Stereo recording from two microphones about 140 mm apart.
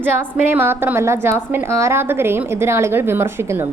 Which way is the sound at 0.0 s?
15° right (ahead or behind).